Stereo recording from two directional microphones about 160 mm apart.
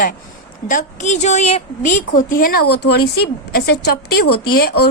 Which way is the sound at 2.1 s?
60° left (ahead or behind).